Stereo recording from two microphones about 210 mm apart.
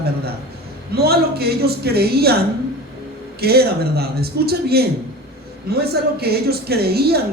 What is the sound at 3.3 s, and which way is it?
Speech, 50° right (ahead or behind).